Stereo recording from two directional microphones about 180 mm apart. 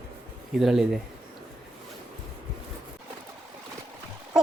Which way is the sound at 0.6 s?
Centre (ahead or behind).